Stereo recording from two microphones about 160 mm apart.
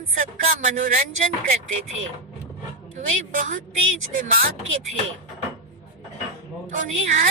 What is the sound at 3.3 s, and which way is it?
A woman's voice, 55° right (ahead or behind).